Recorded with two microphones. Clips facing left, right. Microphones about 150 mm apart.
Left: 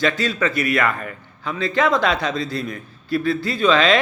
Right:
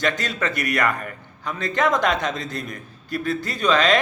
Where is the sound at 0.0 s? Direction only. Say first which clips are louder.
Left 4 dB; 50° right (ahead or behind).